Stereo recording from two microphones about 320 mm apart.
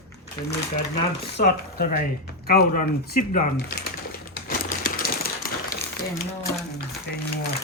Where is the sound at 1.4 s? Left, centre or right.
Left.